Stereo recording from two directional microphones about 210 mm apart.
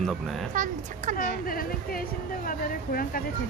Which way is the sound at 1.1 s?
45° left (ahead or behind).